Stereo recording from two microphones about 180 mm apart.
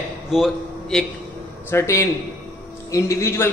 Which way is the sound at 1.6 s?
15° left (ahead or behind).